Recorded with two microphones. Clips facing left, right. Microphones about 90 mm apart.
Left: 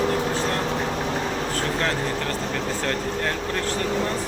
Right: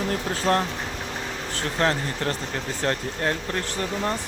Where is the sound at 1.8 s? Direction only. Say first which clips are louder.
Right 1 dB; 25° right (ahead or behind).